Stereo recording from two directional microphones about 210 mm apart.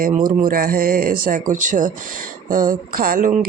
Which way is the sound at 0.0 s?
40° right (ahead or behind).